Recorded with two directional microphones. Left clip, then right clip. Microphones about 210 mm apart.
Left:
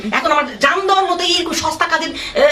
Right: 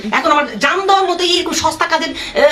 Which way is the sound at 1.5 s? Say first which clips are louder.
Right 2 dB; 15° right (ahead or behind).